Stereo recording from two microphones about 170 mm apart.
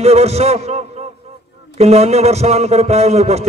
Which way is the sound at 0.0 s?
40° right (ahead or behind).